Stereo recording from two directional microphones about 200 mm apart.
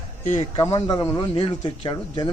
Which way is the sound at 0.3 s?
30° left (ahead or behind).